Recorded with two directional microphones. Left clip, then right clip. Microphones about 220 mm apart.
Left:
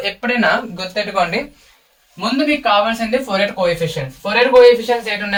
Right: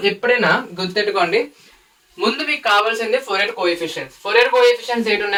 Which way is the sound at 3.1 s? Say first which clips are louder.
Left 1 dB; 10° right (ahead or behind).